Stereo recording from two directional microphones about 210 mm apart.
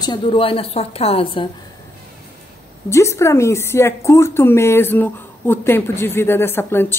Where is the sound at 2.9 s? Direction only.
15° left (ahead or behind).